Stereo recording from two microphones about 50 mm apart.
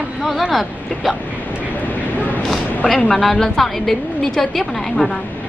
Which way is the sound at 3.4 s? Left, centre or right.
Centre.